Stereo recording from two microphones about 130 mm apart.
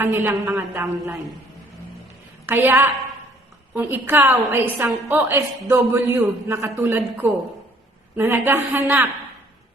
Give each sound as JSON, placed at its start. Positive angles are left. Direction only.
{"t": 0.0, "sound": "a woman's voice", "side_deg": -20}
{"t": 2.5, "sound": "a woman's voice", "side_deg": -15}